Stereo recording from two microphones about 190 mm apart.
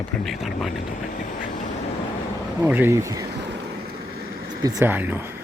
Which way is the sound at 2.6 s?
5° right (ahead or behind).